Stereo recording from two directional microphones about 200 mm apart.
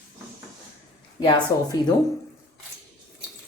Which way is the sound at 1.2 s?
20° left (ahead or behind).